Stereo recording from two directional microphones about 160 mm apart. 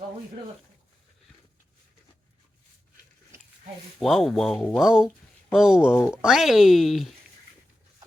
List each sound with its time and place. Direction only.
4.0 s speech: centre (ahead or behind)
5.9 s speech: 15° left (ahead or behind)
6.2 s speech: centre (ahead or behind)